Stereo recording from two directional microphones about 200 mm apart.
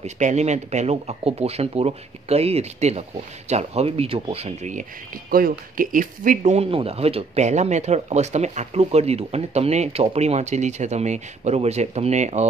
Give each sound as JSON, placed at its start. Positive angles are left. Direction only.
{"t": 0.0, "sound": "speech", "side_deg": -35}